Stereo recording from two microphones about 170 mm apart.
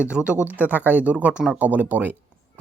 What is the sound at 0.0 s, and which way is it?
Speech, 5° right (ahead or behind).